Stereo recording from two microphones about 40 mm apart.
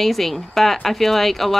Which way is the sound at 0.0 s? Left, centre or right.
Centre.